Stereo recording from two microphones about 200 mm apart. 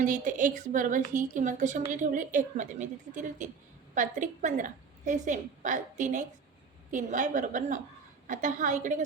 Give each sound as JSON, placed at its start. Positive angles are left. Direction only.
{"t": 0.0, "sound": "a woman's voice", "side_deg": -40}